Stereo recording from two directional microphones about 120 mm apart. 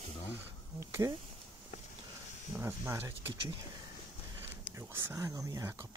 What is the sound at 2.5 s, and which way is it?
Speech, 20° right (ahead or behind).